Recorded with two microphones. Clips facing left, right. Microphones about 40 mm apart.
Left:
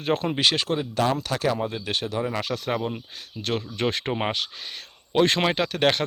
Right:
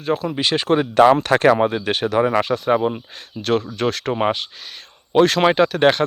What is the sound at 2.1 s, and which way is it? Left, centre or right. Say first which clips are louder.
Speech: right 12 dB; right.